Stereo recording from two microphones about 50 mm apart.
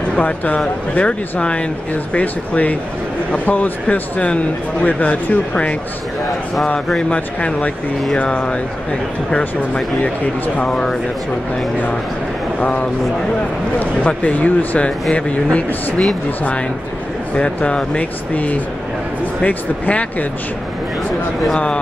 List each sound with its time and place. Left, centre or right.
0.9 s speech: left
7.0 s speech: left
10.7 s speech: centre
12.5 s speech: left
14.8 s speech: left
17.4 s speech: centre